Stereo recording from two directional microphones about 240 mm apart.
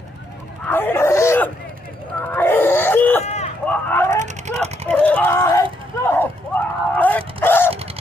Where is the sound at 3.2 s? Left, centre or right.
Left.